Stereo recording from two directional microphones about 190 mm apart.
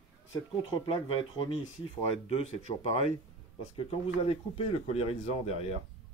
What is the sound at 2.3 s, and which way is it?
Speech, 35° left (ahead or behind).